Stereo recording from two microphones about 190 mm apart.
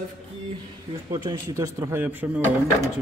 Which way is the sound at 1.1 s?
20° right (ahead or behind).